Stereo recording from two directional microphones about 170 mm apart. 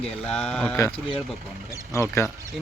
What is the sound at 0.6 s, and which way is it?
Speech, 15° left (ahead or behind).